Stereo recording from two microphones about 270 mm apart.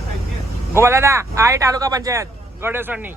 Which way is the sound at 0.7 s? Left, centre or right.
Centre.